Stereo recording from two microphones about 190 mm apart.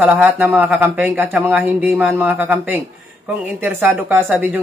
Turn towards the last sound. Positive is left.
turn(degrees=-10)  # may be behind; listen again after turning